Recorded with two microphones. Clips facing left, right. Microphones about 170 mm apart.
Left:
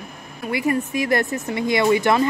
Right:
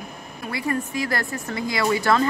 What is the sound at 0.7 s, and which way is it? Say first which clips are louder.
Speech: left 4 dB; 20° left (ahead or behind).